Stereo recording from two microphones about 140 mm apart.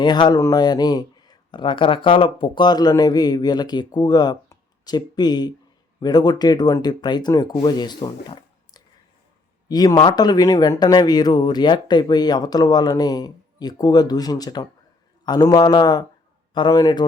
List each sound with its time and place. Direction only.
0.0 s a man's voice: 30° left (ahead or behind)